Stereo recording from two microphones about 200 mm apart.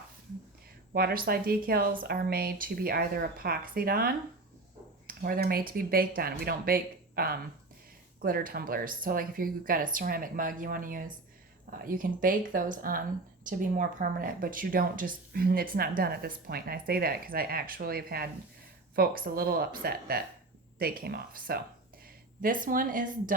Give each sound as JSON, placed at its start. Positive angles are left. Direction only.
{"t": 0.9, "sound": "speech", "side_deg": -45}